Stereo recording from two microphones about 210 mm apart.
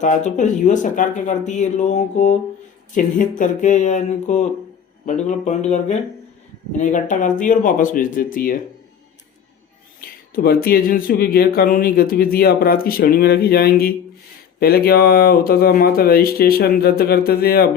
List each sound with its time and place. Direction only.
0.0 s speech: 35° left (ahead or behind)
10.0 s speech: 45° left (ahead or behind)